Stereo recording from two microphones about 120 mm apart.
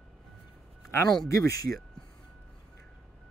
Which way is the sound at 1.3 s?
30° left (ahead or behind).